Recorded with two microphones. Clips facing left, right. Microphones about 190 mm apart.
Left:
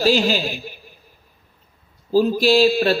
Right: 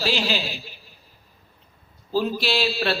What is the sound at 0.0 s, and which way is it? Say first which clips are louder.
Speech: left 7 dB; 45° left (ahead or behind).